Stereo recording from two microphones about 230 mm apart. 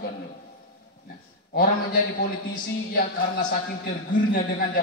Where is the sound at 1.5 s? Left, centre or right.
Left.